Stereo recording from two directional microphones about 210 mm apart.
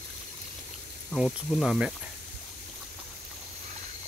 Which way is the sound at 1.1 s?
Centre (ahead or behind).